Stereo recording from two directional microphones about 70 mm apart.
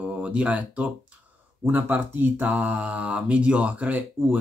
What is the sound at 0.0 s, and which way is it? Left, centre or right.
Speech, centre.